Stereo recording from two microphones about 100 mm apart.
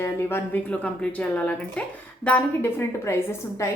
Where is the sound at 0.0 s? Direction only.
25° left (ahead or behind).